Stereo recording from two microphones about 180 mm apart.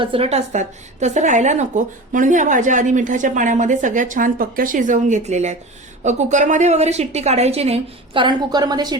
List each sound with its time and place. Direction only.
0.0 s a woman's voice: 30° right (ahead or behind)